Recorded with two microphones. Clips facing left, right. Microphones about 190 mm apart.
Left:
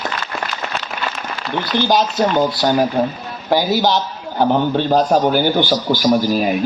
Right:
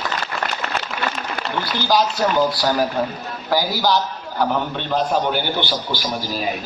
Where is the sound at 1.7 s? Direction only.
20° left (ahead or behind); by 6.1 s 45° left (ahead or behind).